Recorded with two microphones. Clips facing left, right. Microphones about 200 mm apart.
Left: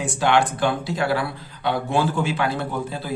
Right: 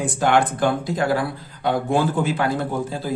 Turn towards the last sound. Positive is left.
turn(degrees=-45)  # may be behind; listen again after turning